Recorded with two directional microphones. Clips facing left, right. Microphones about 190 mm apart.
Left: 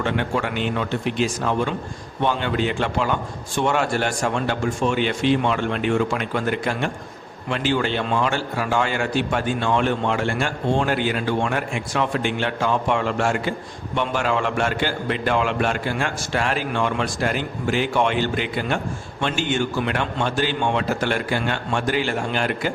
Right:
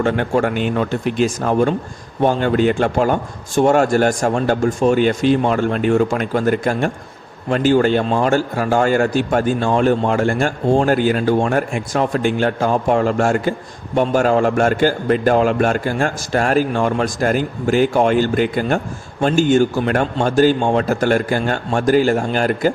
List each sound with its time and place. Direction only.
0.0 s a man's voice: 45° right (ahead or behind)